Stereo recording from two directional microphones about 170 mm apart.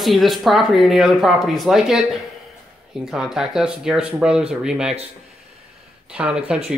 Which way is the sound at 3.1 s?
5° right (ahead or behind).